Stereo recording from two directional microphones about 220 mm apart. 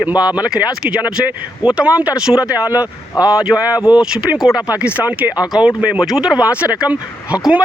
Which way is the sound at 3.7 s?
15° left (ahead or behind).